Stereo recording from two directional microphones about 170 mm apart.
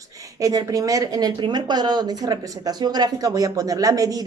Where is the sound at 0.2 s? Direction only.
20° right (ahead or behind).